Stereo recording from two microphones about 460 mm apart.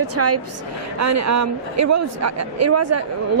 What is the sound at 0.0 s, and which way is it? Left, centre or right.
Speech, right.